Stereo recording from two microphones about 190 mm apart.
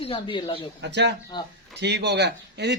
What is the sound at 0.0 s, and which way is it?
Speech, 30° left (ahead or behind).